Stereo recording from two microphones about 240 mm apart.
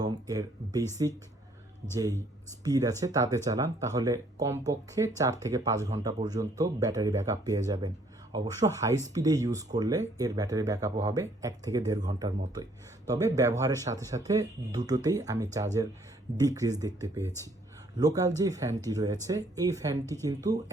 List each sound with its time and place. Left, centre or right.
0.0 s speech: centre
2.6 s speech: centre